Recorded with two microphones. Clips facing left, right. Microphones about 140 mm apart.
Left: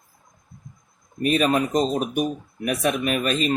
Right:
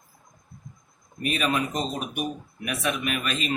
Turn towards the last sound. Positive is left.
turn(degrees=40)  # may be behind; listen again after turning